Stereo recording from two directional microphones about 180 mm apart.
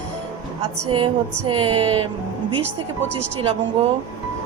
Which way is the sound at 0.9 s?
30° right (ahead or behind).